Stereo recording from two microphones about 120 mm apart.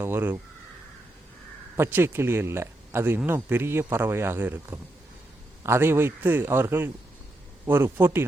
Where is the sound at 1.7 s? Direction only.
20° right (ahead or behind).